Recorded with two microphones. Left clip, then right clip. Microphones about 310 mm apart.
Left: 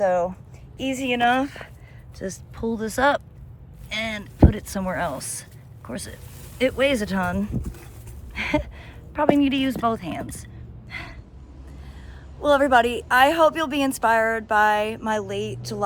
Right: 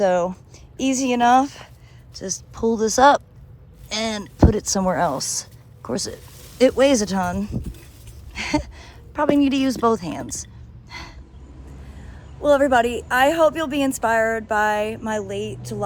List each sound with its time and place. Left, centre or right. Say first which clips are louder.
0.8 s speech: right 4 dB; right
1.3 s speech: right 6 dB; centre
10.4 s gasp: right 2 dB; centre
12.4 s a woman's voice: right 1 dB; centre